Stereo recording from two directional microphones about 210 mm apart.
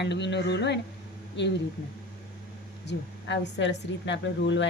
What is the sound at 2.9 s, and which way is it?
A woman's voice, 55° left (ahead or behind).